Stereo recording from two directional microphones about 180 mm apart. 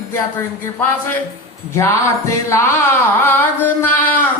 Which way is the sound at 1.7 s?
15° left (ahead or behind).